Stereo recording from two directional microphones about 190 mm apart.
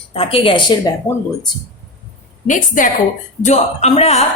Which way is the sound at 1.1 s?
15° left (ahead or behind).